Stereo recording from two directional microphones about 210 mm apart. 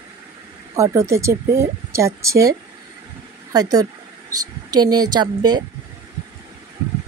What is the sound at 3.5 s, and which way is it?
Speech, 20° right (ahead or behind).